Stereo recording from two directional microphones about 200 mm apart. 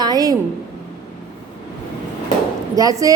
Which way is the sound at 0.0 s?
20° right (ahead or behind).